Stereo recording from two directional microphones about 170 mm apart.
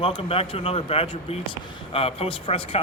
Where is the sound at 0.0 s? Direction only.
35° left (ahead or behind).